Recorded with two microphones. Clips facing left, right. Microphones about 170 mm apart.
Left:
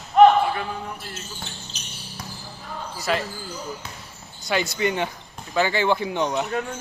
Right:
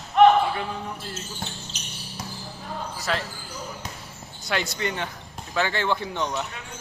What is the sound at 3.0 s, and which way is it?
Speech, centre (ahead or behind).